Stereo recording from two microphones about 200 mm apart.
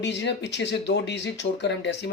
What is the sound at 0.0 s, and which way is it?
Speech, 60° left (ahead or behind).